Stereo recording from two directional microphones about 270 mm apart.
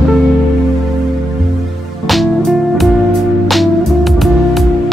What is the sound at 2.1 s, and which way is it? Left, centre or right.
Music, centre.